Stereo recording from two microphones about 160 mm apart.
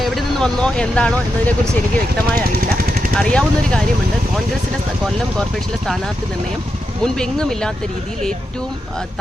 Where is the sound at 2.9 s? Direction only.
65° right (ahead or behind).